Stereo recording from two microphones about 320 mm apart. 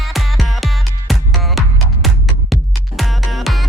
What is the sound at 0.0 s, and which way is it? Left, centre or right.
Music, centre.